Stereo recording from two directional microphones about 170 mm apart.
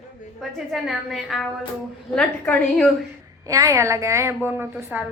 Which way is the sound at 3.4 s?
20° right (ahead or behind).